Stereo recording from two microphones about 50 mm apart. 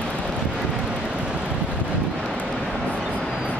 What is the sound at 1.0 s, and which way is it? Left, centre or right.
Vehicle, right.